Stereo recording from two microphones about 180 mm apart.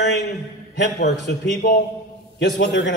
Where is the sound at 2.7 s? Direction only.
90° left.